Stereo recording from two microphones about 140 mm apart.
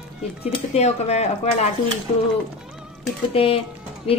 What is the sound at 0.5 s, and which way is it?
Speech, 50° left (ahead or behind).